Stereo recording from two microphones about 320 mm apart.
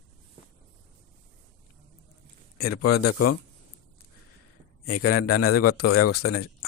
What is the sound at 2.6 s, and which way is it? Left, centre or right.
Speech, left.